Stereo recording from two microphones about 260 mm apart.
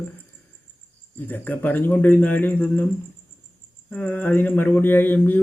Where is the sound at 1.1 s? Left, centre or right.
Centre.